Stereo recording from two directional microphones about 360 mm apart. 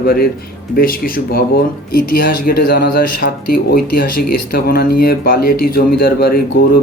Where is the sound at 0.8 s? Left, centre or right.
Left.